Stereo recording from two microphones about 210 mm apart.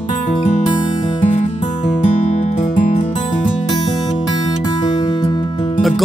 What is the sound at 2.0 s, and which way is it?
Music, 35° left (ahead or behind).